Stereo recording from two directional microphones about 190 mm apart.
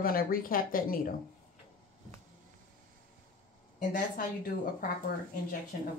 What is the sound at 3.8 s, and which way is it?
Speech, 45° left (ahead or behind).